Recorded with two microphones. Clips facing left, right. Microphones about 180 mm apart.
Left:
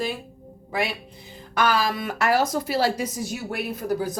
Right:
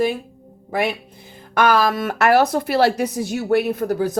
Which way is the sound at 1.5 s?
55° right (ahead or behind).